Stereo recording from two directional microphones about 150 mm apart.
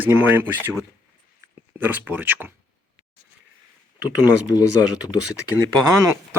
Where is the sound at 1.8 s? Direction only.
10° right (ahead or behind).